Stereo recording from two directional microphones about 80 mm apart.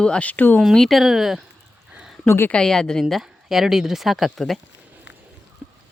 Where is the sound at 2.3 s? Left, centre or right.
Left.